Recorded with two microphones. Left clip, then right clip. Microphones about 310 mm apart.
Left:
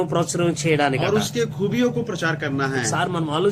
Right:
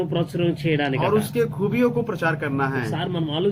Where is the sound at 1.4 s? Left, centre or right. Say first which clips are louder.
Right 1 dB; centre.